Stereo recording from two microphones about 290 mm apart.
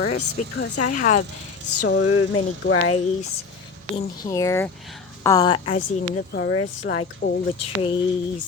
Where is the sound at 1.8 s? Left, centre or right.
Left.